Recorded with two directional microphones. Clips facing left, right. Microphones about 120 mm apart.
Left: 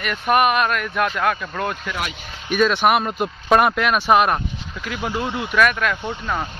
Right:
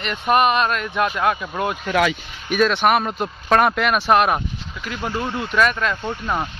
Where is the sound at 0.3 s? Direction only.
5° left (ahead or behind).